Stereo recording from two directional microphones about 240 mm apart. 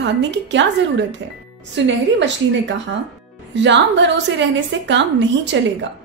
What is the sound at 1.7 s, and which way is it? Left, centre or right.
Speech, right.